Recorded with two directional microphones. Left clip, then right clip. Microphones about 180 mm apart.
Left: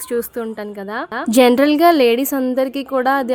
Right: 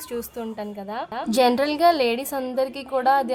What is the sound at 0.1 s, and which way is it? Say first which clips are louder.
A woman's voice: left 9 dB; 25° left (ahead or behind).